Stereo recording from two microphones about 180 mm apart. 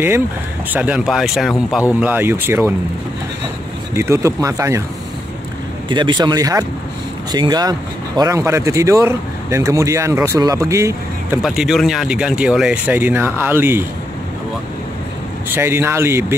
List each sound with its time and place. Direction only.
0.7 s speech: 5° right (ahead or behind)
3.9 s speech: 15° right (ahead or behind)
5.9 s speech: 25° right (ahead or behind)
11.4 s speech: centre (ahead or behind)
15.5 s speech: 10° right (ahead or behind)